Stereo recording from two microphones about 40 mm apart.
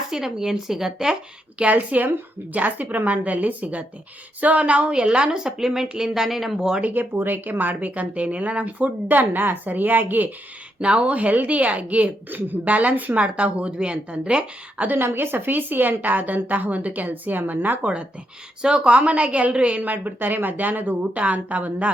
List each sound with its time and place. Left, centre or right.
0.1 s speech: centre
1.7 s a woman's voice: right
5.4 s speech: centre
6.8 s speech: right
9.0 s a woman's voice: right
10.8 s a woman's voice: right
13.1 s speech: right
14.9 s a woman's voice: right
18.6 s a woman's voice: right
19.8 s a woman's voice: right
21.2 s speech: right